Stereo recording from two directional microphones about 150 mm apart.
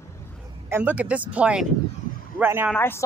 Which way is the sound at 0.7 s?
10° right (ahead or behind).